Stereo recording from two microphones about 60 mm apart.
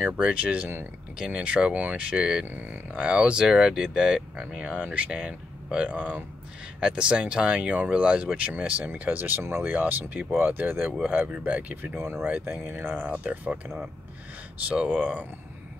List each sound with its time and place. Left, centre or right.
0.2 s speech: right
2.4 s speech: right
9.4 s speech: right
9.7 s speech: right
12.0 s speech: right
12.3 s speech: right
13.2 s speech: right
15.0 s speech: right